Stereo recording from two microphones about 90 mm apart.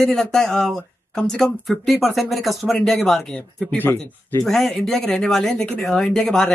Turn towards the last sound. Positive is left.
turn(degrees=5)  # may be behind; listen again after turning